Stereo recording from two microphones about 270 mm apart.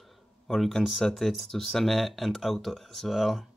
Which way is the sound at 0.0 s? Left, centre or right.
Centre.